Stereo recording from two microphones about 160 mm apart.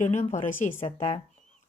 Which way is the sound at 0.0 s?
50° left (ahead or behind).